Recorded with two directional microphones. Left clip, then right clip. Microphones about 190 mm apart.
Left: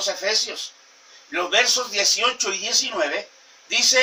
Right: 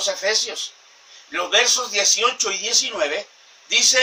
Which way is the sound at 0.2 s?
10° right (ahead or behind).